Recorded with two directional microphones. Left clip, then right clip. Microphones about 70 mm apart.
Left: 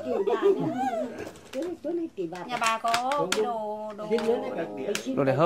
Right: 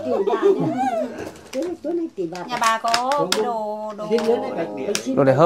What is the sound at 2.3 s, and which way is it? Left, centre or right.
Speech, centre.